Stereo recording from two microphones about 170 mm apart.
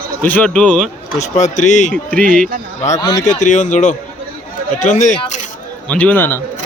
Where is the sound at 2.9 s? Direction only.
20° left (ahead or behind).